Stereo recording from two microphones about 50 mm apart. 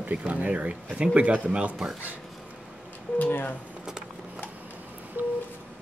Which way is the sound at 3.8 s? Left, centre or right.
Centre.